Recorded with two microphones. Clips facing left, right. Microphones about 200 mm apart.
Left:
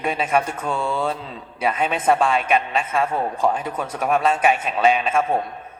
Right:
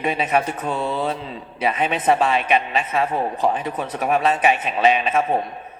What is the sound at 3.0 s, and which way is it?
Speech, 25° right (ahead or behind).